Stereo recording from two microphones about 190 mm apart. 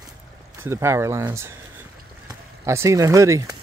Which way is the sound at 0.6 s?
15° right (ahead or behind).